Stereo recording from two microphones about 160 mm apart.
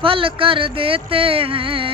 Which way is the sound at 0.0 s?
35° right (ahead or behind).